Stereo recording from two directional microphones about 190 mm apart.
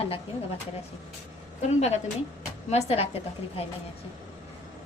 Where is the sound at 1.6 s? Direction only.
35° left (ahead or behind).